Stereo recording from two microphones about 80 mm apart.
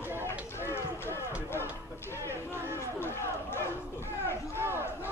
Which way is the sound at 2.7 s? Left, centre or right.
Left.